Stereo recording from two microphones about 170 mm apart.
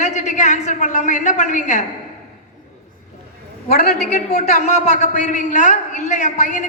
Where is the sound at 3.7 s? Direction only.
65° left (ahead or behind).